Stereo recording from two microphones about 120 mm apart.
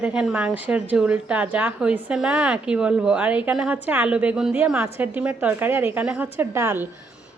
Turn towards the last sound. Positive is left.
turn(degrees=-20)  # may be behind; listen again after turning